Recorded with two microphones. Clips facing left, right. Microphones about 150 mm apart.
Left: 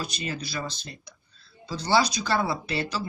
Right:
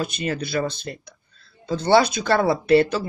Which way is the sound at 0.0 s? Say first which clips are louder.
Right 7 dB; 55° right (ahead or behind).